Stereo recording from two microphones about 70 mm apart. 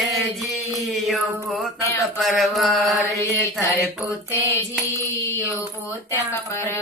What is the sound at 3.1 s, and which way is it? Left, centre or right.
Mantra, left.